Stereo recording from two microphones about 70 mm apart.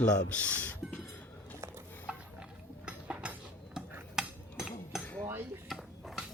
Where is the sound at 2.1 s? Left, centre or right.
Centre.